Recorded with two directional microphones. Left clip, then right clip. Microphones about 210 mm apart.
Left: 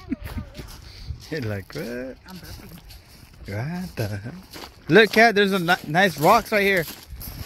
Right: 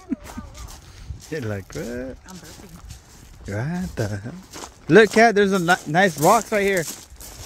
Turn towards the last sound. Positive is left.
turn(degrees=-5)  # may be behind; listen again after turning